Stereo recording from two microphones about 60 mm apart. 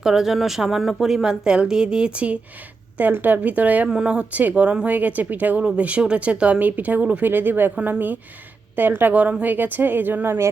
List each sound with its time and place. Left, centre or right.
0.0 s speech: centre
3.0 s speech: right
3.8 s a woman's voice: centre; by 10.3 s right